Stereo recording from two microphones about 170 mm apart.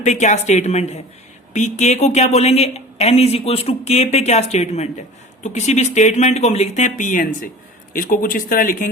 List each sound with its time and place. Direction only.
0.0 s a woman's voice: 45° left (ahead or behind)